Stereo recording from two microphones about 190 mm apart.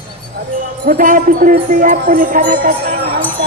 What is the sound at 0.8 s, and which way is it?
Music, 45° right (ahead or behind).